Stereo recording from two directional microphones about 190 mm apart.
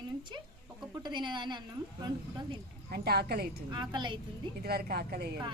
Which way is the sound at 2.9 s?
55° right (ahead or behind).